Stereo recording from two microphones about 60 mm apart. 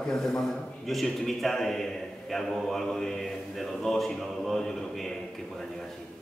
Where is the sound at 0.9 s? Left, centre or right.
Centre.